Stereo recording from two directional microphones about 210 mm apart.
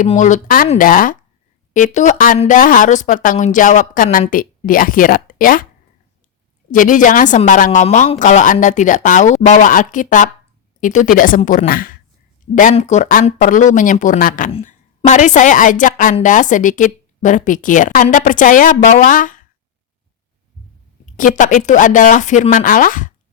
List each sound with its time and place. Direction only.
0.0 s a woman's voice: 35° left (ahead or behind)
6.7 s a woman's voice: 40° left (ahead or behind)
21.2 s a woman's voice: 40° left (ahead or behind)